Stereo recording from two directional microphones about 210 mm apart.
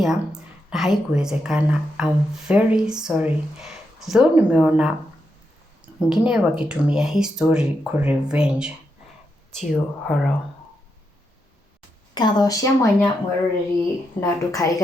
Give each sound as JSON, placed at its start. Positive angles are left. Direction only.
{"t": 0.0, "sound": "a woman's voice", "side_deg": 0}
{"t": 6.0, "sound": "a woman's voice", "side_deg": -5}
{"t": 12.1, "sound": "speech", "side_deg": 20}
{"t": 14.2, "sound": "speech", "side_deg": 15}